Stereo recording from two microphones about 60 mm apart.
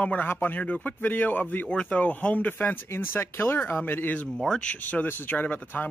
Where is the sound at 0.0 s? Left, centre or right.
Left.